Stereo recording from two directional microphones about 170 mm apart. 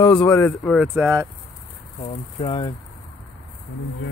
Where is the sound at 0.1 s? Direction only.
10° left (ahead or behind).